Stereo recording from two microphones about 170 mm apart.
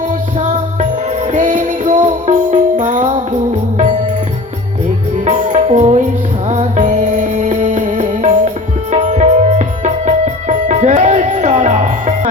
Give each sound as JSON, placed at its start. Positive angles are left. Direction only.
{"t": 0.3, "sound": "music", "side_deg": -45}
{"t": 5.2, "sound": "music", "side_deg": -40}